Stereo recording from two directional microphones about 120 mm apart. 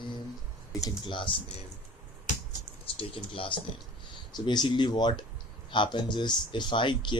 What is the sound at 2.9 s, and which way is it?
Speech, 50° left (ahead or behind).